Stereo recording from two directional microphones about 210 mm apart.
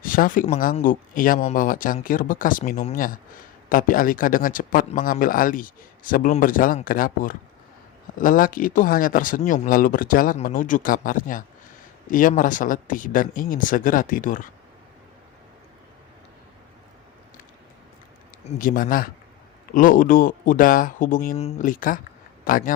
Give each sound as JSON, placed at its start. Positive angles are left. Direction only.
{"t": 0.0, "sound": "speech", "side_deg": 40}
{"t": 18.4, "sound": "speech", "side_deg": 40}